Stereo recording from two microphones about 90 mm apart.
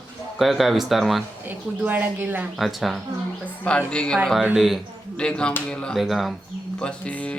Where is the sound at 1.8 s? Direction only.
20° right (ahead or behind).